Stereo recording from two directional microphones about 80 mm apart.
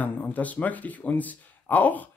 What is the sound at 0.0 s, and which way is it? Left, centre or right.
Speech, left.